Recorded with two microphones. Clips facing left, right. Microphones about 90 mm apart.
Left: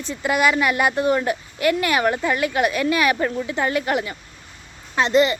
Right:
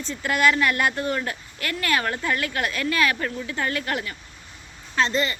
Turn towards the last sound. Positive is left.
turn(degrees=20)  # may be behind; listen again after turning